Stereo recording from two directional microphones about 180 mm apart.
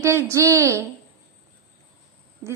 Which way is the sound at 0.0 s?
15° right (ahead or behind).